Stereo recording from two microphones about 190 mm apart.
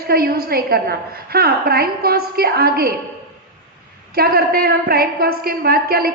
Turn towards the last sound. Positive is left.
turn(degrees=-55)  # may be behind; listen again after turning